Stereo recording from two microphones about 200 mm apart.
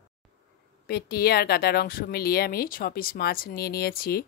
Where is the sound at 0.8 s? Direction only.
50° left (ahead or behind).